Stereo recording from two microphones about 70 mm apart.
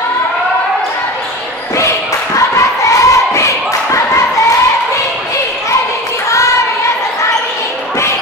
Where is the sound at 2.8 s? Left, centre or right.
Left.